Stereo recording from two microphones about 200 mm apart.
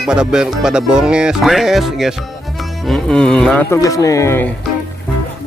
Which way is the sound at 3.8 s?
15° left (ahead or behind).